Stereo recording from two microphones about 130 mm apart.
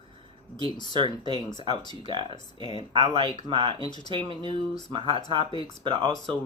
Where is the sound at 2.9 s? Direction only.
40° right (ahead or behind).